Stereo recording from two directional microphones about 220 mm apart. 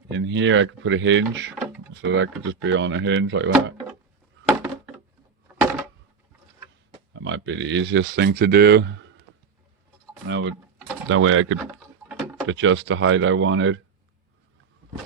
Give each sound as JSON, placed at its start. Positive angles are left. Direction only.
{"t": 0.1, "sound": "speech", "side_deg": -55}
{"t": 5.5, "sound": "a sound", "side_deg": -5}
{"t": 7.2, "sound": "speech", "side_deg": -55}
{"t": 10.2, "sound": "speech", "side_deg": -55}
{"t": 11.6, "sound": "a sound", "side_deg": -5}
{"t": 12.5, "sound": "speech", "side_deg": -60}